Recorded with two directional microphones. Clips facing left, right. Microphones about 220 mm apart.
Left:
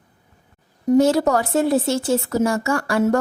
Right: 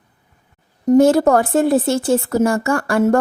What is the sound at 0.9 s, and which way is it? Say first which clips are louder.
A woman's voice: right 4 dB; 50° right (ahead or behind).